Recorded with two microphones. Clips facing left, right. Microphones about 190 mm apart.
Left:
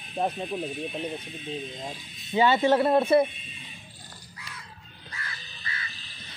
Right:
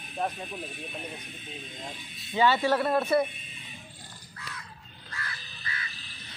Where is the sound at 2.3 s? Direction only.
20° left (ahead or behind).